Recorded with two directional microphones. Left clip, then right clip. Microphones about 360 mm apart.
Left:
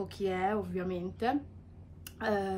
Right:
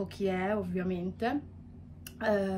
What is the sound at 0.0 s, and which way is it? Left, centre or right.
Speech, centre.